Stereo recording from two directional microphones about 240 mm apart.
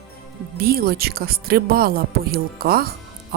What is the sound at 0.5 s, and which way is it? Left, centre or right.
A woman's voice, right.